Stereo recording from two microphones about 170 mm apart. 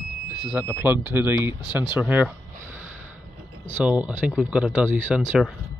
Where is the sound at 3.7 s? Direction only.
10° right (ahead or behind).